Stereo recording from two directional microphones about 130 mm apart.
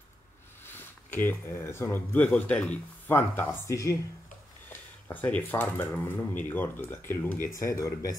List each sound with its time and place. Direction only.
0.7 s speech: 15° left (ahead or behind)
4.6 s speech: 15° left (ahead or behind)